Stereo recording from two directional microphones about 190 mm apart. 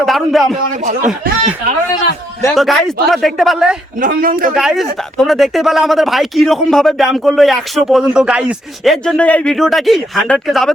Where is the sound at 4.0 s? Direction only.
50° right (ahead or behind).